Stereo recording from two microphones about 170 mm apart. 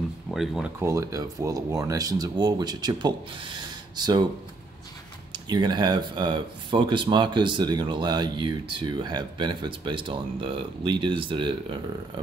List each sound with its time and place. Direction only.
0.3 s speech: centre (ahead or behind)
0.7 s speech: 15° right (ahead or behind)
5.3 s speech: 25° right (ahead or behind)